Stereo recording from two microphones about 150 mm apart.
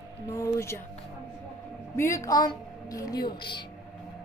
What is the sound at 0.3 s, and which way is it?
Speech, 20° left (ahead or behind).